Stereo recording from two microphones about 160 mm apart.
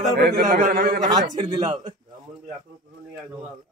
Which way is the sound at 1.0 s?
25° right (ahead or behind).